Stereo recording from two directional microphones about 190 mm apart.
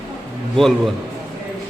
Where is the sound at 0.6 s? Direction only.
Centre (ahead or behind).